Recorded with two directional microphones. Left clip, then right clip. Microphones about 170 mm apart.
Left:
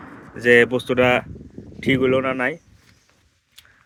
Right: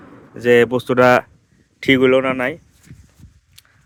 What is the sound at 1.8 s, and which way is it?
Speech, 50° right (ahead or behind).